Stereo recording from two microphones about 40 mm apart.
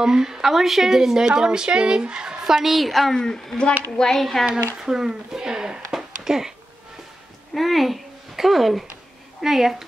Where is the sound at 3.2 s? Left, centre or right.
Centre.